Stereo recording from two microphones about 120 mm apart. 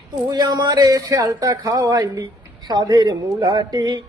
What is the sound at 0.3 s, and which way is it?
A man's voice, 35° right (ahead or behind).